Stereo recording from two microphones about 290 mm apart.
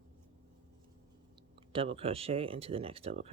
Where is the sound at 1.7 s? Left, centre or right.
Centre.